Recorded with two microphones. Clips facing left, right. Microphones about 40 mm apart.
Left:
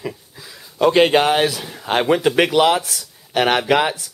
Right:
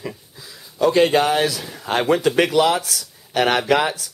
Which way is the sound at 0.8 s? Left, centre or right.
Left.